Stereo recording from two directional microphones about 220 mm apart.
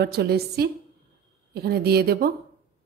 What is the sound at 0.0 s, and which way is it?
Speech, 45° right (ahead or behind).